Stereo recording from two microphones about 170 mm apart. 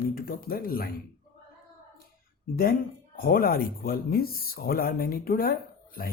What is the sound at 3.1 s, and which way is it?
Speech, 60° left (ahead or behind).